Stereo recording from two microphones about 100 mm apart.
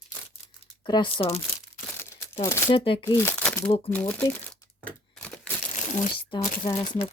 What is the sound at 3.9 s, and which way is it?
Speech, 15° left (ahead or behind).